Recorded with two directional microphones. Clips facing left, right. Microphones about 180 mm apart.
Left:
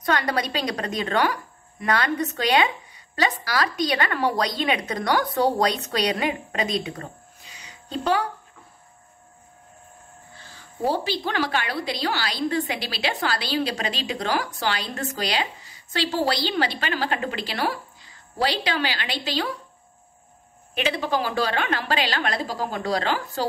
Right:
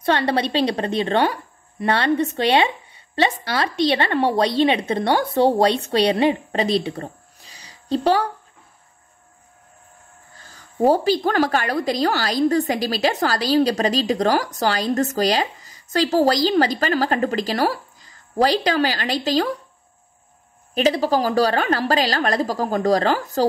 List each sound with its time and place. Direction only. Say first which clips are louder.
0.0 s speech: right 4 dB; 30° right (ahead or behind)
10.3 s a woman's voice: right 8 dB; 45° right (ahead or behind)
20.7 s a woman's voice: right 6 dB; 40° right (ahead or behind)